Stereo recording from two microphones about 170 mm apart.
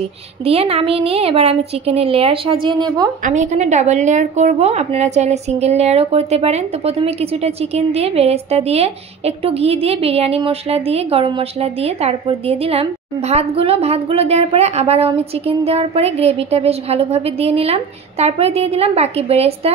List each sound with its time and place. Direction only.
0.5 s a woman's voice: 35° right (ahead or behind)
3.3 s a woman's voice: 45° right (ahead or behind)